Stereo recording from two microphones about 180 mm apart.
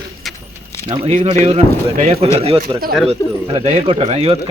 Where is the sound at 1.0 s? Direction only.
35° right (ahead or behind).